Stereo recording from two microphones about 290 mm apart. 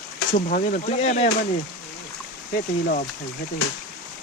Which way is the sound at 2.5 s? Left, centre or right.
Left.